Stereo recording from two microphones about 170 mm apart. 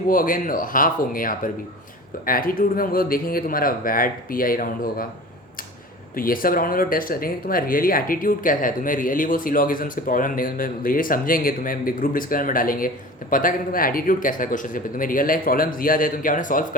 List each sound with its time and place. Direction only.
0.1 s speech: 55° left (ahead or behind)
6.1 s speech: 55° left (ahead or behind)